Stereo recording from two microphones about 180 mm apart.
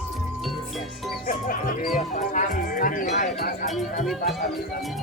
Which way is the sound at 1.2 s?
50° left (ahead or behind).